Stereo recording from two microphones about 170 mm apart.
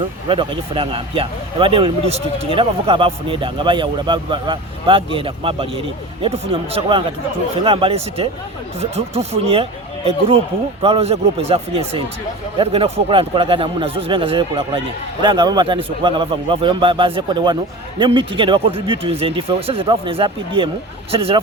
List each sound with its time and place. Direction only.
0.3 s a man's voice: 30° right (ahead or behind)